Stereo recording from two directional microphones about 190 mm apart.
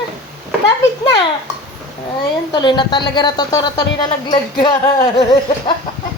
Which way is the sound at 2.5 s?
25° left (ahead or behind).